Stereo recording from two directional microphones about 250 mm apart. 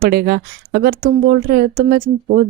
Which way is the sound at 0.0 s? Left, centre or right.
Right.